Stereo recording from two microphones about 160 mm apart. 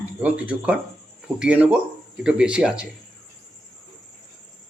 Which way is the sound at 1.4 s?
5° right (ahead or behind).